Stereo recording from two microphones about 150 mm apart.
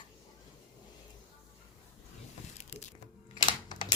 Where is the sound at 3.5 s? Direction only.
30° left (ahead or behind).